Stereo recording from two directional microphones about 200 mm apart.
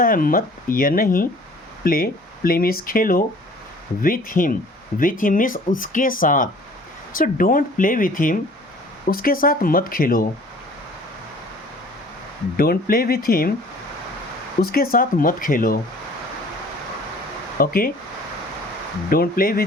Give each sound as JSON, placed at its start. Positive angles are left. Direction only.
{"t": 0.0, "sound": "speech", "side_deg": 45}
{"t": 12.5, "sound": "speech", "side_deg": 45}
{"t": 14.6, "sound": "speech", "side_deg": 50}
{"t": 17.6, "sound": "speech", "side_deg": 45}
{"t": 19.1, "sound": "speech", "side_deg": 45}